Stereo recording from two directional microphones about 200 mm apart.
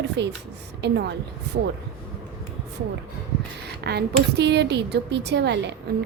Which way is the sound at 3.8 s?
55° right (ahead or behind).